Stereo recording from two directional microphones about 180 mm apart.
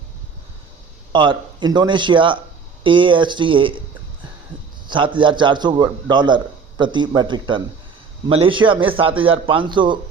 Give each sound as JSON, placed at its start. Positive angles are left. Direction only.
{"t": 1.1, "sound": "a man's voice", "side_deg": -25}
{"t": 4.9, "sound": "a man's voice", "side_deg": -25}